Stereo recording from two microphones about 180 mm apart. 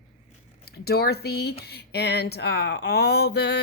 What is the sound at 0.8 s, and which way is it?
Speech, 60° left (ahead or behind).